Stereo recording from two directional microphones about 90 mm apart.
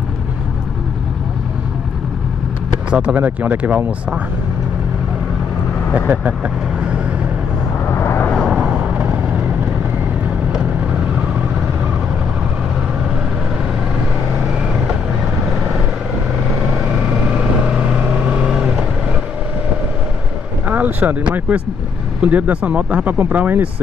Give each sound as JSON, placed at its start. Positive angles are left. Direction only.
{"t": 2.9, "sound": "speech", "side_deg": -10}
{"t": 5.9, "sound": "speech", "side_deg": -15}
{"t": 7.9, "sound": "vehicle", "side_deg": 30}
{"t": 8.5, "sound": "vehicle", "side_deg": -10}
{"t": 10.5, "sound": "vehicle", "side_deg": -15}
{"t": 16.7, "sound": "vehicle", "side_deg": -10}
{"t": 20.6, "sound": "speech", "side_deg": -20}